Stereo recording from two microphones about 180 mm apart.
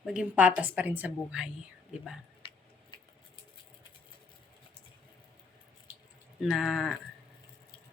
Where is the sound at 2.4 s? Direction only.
30° left (ahead or behind).